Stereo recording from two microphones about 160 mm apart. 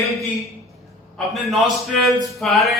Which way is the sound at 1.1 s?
Centre (ahead or behind).